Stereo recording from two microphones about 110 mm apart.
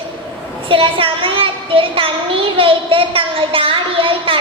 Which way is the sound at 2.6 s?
55° right (ahead or behind).